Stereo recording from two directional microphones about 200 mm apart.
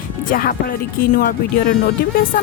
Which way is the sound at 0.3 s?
45° left (ahead or behind).